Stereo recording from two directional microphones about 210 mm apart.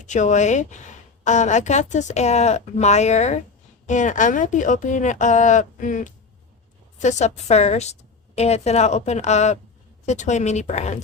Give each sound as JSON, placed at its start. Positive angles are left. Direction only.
{"t": 0.0, "sound": "a woman's voice", "side_deg": 35}